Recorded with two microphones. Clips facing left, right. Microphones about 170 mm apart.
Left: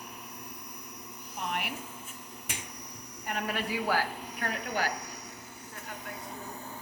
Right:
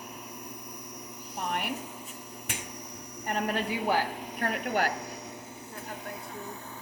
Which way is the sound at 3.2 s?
40° right (ahead or behind).